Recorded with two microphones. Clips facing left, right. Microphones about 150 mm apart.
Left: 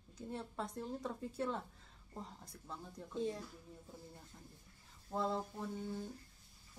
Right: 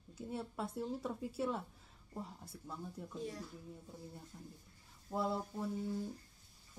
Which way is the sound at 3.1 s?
25° left (ahead or behind).